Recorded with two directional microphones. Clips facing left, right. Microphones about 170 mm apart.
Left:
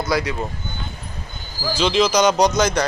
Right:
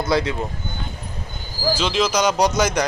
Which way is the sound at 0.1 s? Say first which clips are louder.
Right 2 dB; 25° right (ahead or behind).